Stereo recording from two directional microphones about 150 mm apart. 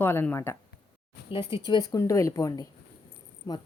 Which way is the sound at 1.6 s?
25° left (ahead or behind).